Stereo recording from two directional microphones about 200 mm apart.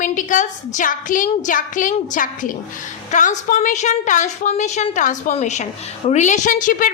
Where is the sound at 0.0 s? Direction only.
40° left (ahead or behind).